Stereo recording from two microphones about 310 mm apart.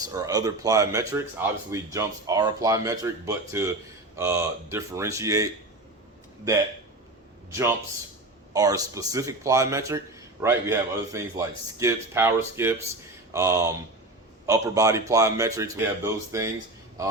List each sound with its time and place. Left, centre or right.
0.0 s speech: centre
7.5 s speech: centre